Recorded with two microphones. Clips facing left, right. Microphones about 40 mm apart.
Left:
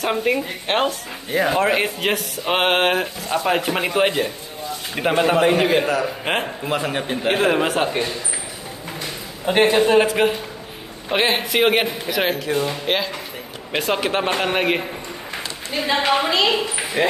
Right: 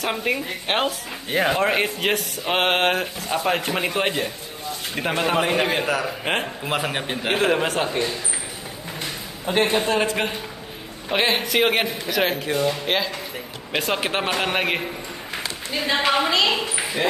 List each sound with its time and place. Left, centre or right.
0.0 s speech: centre
6.7 s a man's voice: centre
7.2 s speech: centre
9.8 s a woman's voice: centre
17.0 s speech: left